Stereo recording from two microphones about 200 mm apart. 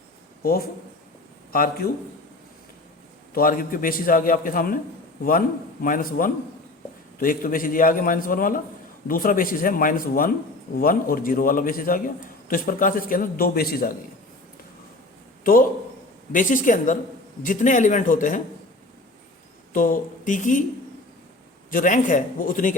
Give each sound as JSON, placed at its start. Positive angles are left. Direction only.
{"t": 1.5, "sound": "a man's voice", "side_deg": 45}
{"t": 3.3, "sound": "a man's voice", "side_deg": 45}
{"t": 5.8, "sound": "a man's voice", "side_deg": 45}
{"t": 16.3, "sound": "a man's voice", "side_deg": 40}
{"t": 19.7, "sound": "a man's voice", "side_deg": 40}
{"t": 21.7, "sound": "a man's voice", "side_deg": 40}